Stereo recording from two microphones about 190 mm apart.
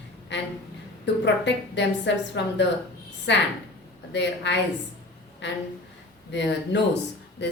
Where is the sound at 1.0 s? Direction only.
65° left (ahead or behind).